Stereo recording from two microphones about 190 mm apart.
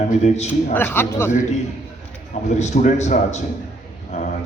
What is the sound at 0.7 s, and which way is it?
Speech, 10° left (ahead or behind).